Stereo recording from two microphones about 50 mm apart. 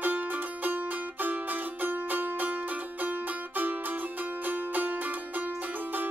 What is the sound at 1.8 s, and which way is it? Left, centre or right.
Music, right.